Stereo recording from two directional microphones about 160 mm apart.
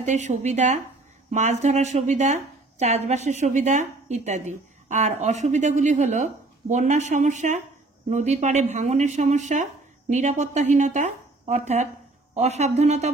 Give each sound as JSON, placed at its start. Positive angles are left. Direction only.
{"t": 0.0, "sound": "a woman's voice", "side_deg": -50}